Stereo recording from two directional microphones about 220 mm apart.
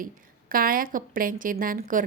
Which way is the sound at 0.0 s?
40° right (ahead or behind).